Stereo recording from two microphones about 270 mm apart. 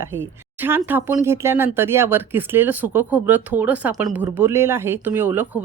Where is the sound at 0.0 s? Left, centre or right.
Centre.